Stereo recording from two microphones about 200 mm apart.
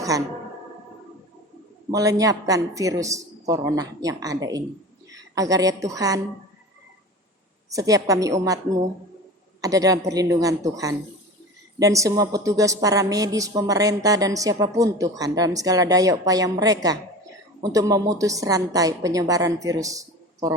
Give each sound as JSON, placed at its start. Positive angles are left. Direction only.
{"t": 1.9, "sound": "a woman's voice", "side_deg": -15}
{"t": 7.7, "sound": "a woman's voice", "side_deg": -15}
{"t": 9.6, "sound": "a woman's voice", "side_deg": -15}